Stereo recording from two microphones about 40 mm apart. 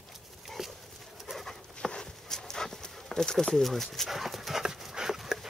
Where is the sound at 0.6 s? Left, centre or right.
Centre.